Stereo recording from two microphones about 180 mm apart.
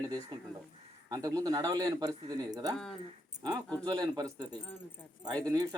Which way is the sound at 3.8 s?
20° right (ahead or behind).